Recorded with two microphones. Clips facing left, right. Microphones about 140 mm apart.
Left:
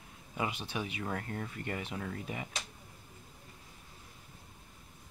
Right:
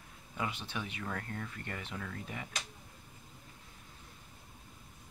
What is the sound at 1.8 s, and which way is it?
Speech, 15° left (ahead or behind).